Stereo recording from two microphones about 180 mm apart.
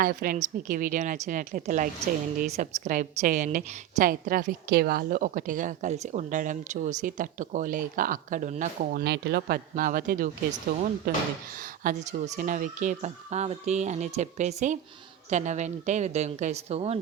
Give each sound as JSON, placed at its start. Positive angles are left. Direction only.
{"t": 0.0, "sound": "a woman's voice", "side_deg": -50}